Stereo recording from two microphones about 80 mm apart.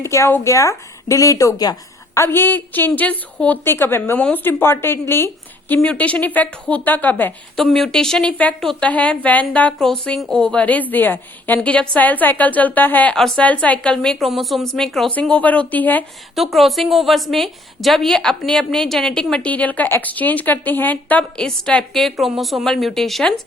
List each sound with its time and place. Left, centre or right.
0.0 s a woman's voice: left
2.1 s a woman's voice: left
7.5 s a woman's voice: centre
9.7 s a woman's voice: centre; by 13.1 s left
13.1 s a woman's voice: centre
13.4 s a woman's voice: centre
15.1 s a woman's voice: centre
16.3 s a woman's voice: centre
19.5 s a woman's voice: centre